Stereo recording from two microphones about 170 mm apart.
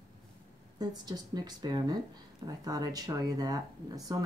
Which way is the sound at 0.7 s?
25° right (ahead or behind).